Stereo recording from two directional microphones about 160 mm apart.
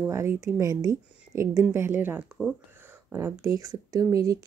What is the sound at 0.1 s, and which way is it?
A woman's voice, 15° right (ahead or behind).